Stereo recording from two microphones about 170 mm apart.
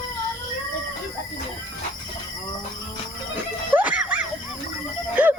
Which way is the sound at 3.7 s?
10° right (ahead or behind).